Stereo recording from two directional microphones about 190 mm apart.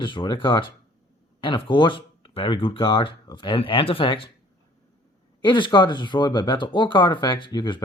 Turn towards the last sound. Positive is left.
turn(degrees=20)  # may be behind; listen again after turning